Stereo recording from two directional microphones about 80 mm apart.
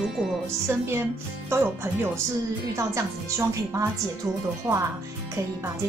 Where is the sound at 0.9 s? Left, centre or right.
Right.